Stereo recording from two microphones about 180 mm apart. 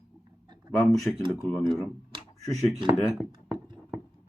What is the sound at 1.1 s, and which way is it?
Speech, 10° left (ahead or behind).